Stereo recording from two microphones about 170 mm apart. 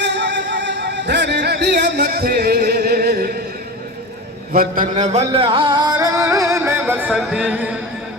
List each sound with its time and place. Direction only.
0.0 s music: 90° right; by 3.2 s 65° right (ahead or behind)
4.5 s music: 55° right (ahead or behind); by 7.2 s 10° right (ahead or behind)
7.2 s speech: 5° right (ahead or behind)